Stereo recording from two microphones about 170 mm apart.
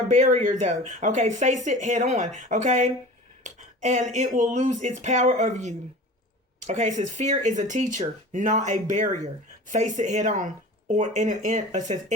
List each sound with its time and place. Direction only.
0.1 s speech: 45° right (ahead or behind)